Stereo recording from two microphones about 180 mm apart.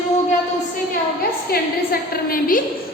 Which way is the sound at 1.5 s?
55° left (ahead or behind).